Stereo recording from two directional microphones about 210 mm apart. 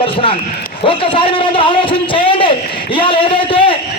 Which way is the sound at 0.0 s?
25° left (ahead or behind).